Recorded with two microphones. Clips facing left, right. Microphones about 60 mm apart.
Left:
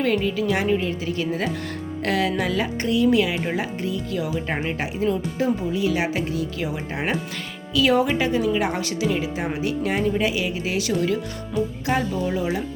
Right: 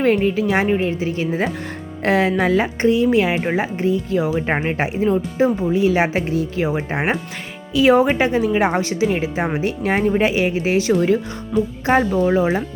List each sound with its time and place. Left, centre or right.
0.0 s speech: right
4.4 s speech: right
7.7 s speech: right